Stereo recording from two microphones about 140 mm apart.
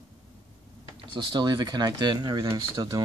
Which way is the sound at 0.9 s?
35° right (ahead or behind).